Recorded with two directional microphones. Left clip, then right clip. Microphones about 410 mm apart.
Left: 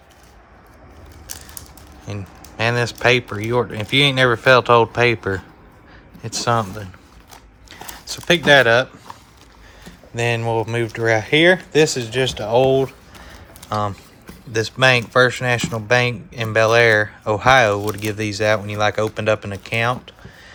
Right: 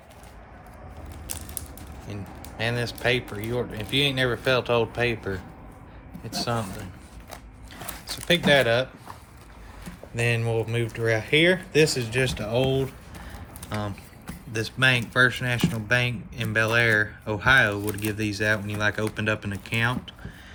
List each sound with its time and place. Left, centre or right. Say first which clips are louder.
2.1 s speech: left 6 dB; centre
7.7 s a sound: left 4 dB; centre
10.2 s speech: left 6 dB; centre
14.5 s speech: left 7 dB; centre